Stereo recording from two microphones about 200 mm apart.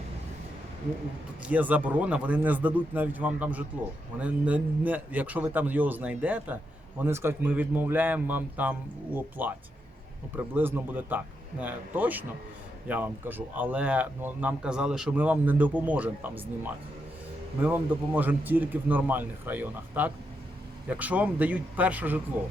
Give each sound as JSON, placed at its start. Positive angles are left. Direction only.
{"t": 1.5, "sound": "speech", "side_deg": -5}